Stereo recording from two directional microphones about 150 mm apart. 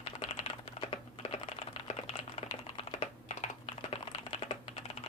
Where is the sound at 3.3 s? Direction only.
50° left (ahead or behind).